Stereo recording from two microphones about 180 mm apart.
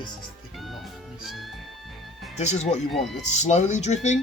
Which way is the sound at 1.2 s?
Centre (ahead or behind).